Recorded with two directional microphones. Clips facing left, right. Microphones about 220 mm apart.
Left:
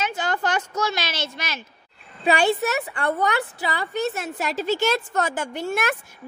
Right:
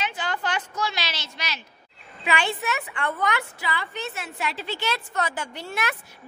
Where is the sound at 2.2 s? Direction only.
40° left (ahead or behind).